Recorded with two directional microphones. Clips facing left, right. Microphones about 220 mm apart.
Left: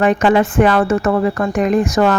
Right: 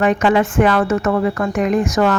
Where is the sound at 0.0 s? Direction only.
35° left (ahead or behind).